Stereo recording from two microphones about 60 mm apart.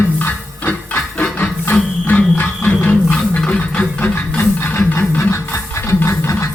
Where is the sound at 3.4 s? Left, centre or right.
Left.